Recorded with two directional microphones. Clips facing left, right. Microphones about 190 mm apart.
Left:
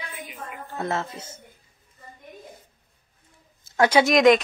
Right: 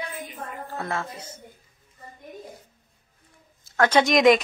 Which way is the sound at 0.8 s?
25° left (ahead or behind).